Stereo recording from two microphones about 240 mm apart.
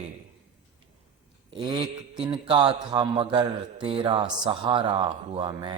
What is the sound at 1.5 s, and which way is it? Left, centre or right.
A man's voice, right.